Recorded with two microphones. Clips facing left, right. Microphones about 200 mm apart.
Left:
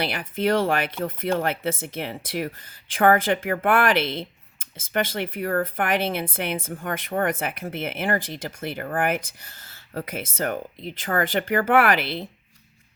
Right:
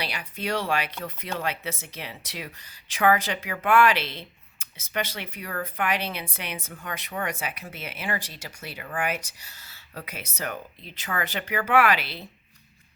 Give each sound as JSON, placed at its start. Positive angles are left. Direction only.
{"t": 0.0, "sound": "speech", "side_deg": 50}